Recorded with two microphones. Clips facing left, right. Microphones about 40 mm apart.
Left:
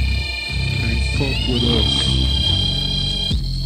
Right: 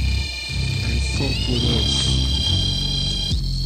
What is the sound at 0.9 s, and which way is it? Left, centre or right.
Music, centre.